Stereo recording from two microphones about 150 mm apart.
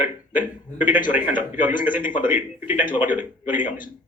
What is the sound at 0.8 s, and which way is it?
A man's voice, 60° left (ahead or behind).